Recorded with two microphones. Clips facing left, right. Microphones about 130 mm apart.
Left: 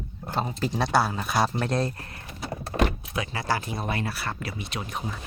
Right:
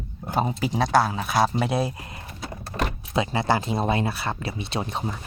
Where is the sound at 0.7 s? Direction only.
Centre (ahead or behind); by 2.2 s 15° right (ahead or behind).